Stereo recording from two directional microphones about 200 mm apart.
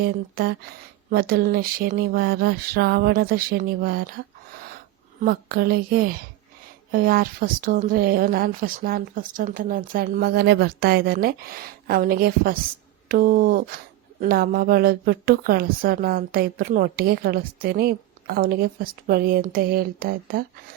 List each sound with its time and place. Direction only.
0.0 s speech: 50° right (ahead or behind)
5.2 s speech: 50° right (ahead or behind)